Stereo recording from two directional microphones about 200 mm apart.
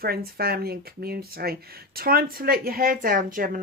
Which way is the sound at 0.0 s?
50° right (ahead or behind).